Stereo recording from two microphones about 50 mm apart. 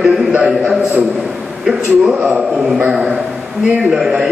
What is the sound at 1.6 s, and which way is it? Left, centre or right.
A man's voice, centre.